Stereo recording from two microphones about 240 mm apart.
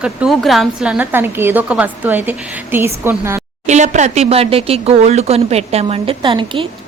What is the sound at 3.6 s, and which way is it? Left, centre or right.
Speech, right.